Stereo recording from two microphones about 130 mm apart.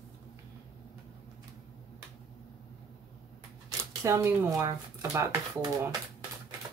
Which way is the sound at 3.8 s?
20° right (ahead or behind).